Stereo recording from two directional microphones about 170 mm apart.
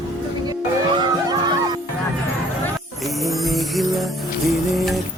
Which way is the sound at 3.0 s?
Centre (ahead or behind).